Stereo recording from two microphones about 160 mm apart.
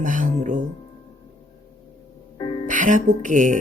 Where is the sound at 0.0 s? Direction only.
55° right (ahead or behind).